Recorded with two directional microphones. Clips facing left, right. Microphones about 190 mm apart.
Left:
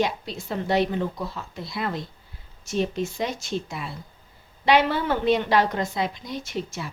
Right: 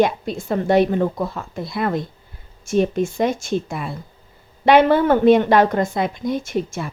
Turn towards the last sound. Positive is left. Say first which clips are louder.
# right 7 dB
turn(degrees=-50)  # may be behind; listen again after turning